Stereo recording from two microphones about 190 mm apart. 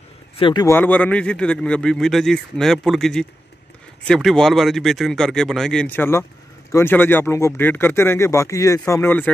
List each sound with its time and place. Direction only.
0.4 s speech: 25° left (ahead or behind)
0.7 s a man's voice: 10° left (ahead or behind)